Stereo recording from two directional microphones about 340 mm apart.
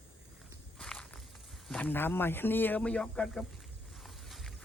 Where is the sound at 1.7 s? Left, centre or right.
Centre.